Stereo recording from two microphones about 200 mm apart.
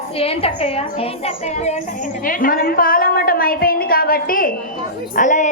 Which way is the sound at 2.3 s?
45° left (ahead or behind).